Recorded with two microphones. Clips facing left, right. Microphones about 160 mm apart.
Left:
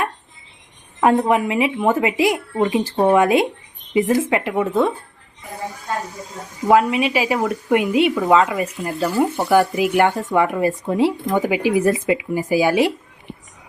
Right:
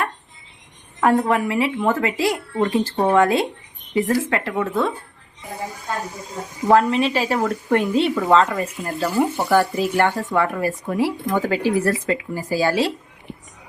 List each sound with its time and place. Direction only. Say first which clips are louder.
1.0 s a woman's voice: left 2 dB; 20° left (ahead or behind)
6.7 s a woman's voice: left 1 dB; 10° left (ahead or behind)